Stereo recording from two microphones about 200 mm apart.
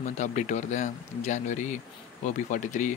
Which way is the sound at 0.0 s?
35° left (ahead or behind).